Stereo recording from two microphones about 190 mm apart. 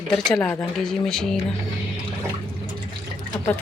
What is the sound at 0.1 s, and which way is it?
Speech, 5° left (ahead or behind).